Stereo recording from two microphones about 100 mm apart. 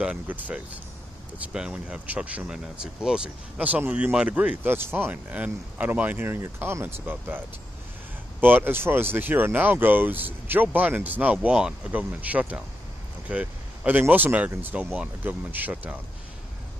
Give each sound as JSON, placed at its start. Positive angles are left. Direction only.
{"t": 0.0, "sound": "speech", "side_deg": -15}